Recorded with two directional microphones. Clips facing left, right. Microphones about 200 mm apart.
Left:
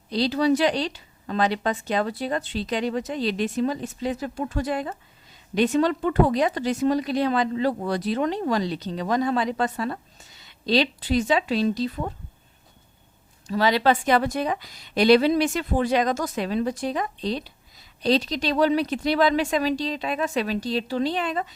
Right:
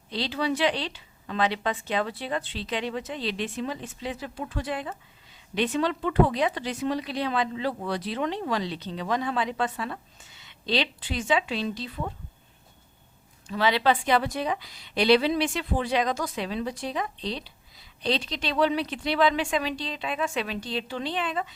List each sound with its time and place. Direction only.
0.1 s a woman's voice: 40° left (ahead or behind)
13.5 s a woman's voice: 40° left (ahead or behind)